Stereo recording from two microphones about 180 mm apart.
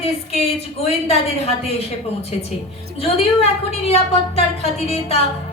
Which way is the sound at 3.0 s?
35° left (ahead or behind).